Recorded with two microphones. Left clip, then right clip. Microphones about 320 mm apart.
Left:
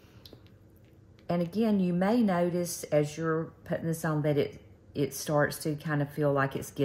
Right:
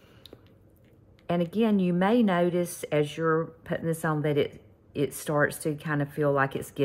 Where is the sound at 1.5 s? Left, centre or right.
Centre.